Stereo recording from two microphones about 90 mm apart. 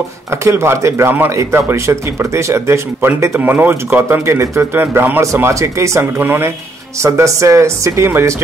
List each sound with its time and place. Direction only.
0.3 s speech: 30° right (ahead or behind)
3.3 s speech: 20° right (ahead or behind)
5.2 s speech: 35° right (ahead or behind)